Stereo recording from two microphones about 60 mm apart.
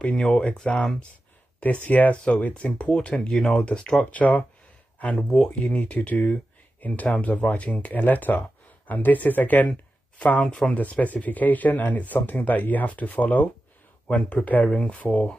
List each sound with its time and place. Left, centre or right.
0.1 s speech: centre
1.9 s speech: left
4.0 s speech: left
4.9 s a sound: left
5.5 s speech: left